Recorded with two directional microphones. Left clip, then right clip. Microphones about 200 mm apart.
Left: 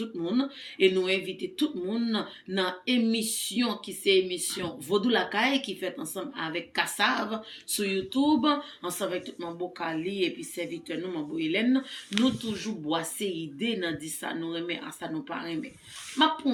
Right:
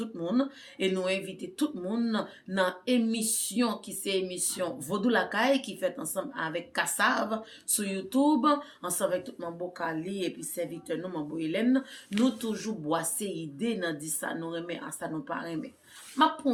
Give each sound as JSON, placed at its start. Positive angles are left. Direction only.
{"t": 0.2, "sound": "speech", "side_deg": -25}
{"t": 12.9, "sound": "speech", "side_deg": -25}